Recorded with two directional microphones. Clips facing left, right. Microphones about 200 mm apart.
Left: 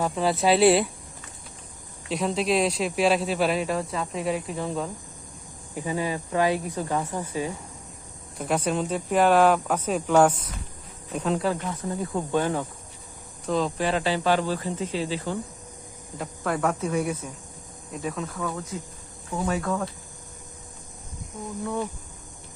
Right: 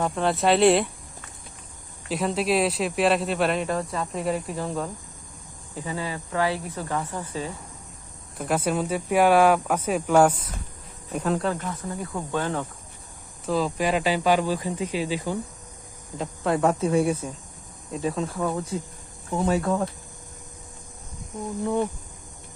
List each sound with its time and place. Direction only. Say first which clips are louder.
0.0 s speech: even; 5° left (ahead or behind)
2.0 s speech: even; centre (ahead or behind)
5.7 s speech: left 3 dB; 15° left (ahead or behind)
8.4 s speech: right 1 dB; 5° right (ahead or behind)
11.9 s speech: left 5 dB; 15° left (ahead or behind)
13.4 s speech: right 1 dB; centre (ahead or behind)
16.1 s speech: right 3 dB; 25° right (ahead or behind)
21.6 s speech: right 5 dB; 25° right (ahead or behind)